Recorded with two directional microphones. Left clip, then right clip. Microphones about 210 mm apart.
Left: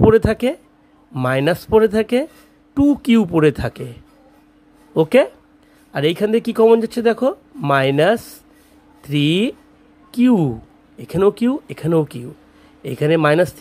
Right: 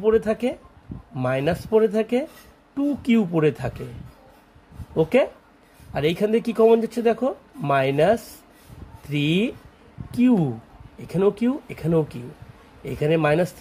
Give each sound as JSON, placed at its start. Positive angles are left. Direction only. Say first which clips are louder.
{"t": 0.0, "sound": "speech", "louder": "left 6 dB", "side_deg": 25}
{"t": 4.9, "sound": "speech", "louder": "left 6 dB", "side_deg": 20}